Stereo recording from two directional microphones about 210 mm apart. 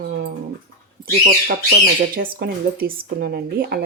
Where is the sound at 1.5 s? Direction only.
45° right (ahead or behind).